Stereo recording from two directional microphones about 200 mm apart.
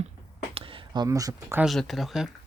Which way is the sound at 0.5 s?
25° right (ahead or behind).